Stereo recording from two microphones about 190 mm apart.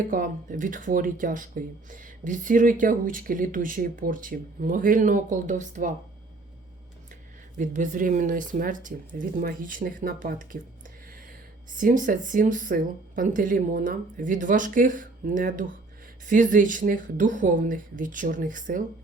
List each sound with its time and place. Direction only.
0.1 s speech: 45° right (ahead or behind)
7.6 s speech: 45° right (ahead or behind)
11.7 s speech: 45° right (ahead or behind)